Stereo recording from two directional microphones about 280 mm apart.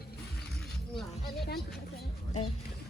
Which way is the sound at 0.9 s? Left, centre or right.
Centre.